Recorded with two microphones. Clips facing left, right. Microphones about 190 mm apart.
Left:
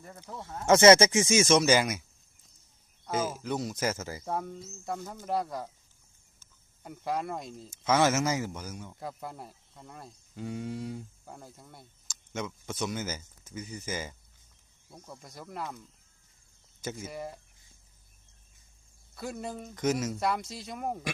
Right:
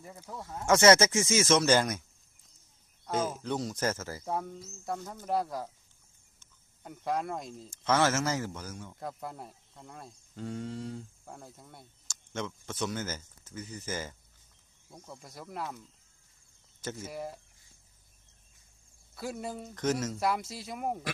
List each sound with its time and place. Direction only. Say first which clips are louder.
0.0 s speech: even; 5° right (ahead or behind)
0.6 s speech: left 3 dB; 20° left (ahead or behind)
3.1 s speech: even; 5° left (ahead or behind)
14.9 s speech: even; centre (ahead or behind)
17.1 s speech: even; centre (ahead or behind)
19.1 s speech: even; 5° right (ahead or behind)
19.7 s speech: left 2 dB; 10° left (ahead or behind)
20.1 s speech: even; 5° right (ahead or behind)